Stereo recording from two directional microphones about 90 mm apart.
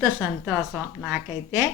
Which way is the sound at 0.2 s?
15° right (ahead or behind).